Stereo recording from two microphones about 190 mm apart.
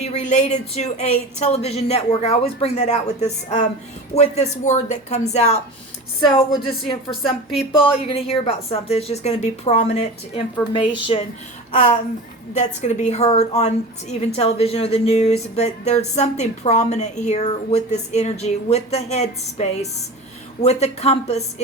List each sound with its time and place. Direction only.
0.0 s speech: 35° left (ahead or behind)
7.2 s a woman's voice: centre (ahead or behind)
8.0 s speech: 30° left (ahead or behind)
11.7 s speech: 40° left (ahead or behind)